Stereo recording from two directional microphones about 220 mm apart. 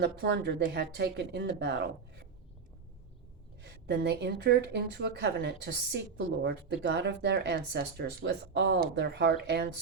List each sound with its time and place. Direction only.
0.0 s speech: 50° right (ahead or behind)
3.6 s speech: 50° right (ahead or behind)